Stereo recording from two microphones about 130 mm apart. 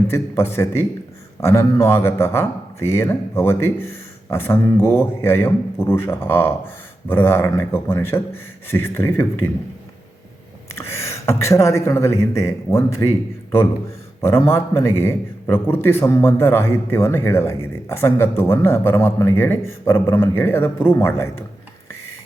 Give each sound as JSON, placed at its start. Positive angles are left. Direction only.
{"t": 0.1, "sound": "a man's voice", "side_deg": 20}
{"t": 10.7, "sound": "a sound", "side_deg": 20}
{"t": 11.3, "sound": "a man's voice", "side_deg": 20}
{"t": 14.2, "sound": "a man's voice", "side_deg": 20}